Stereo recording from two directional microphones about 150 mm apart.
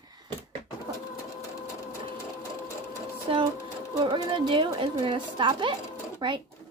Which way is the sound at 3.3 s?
35° right (ahead or behind).